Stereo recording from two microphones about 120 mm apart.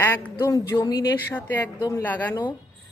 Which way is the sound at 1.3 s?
15° left (ahead or behind).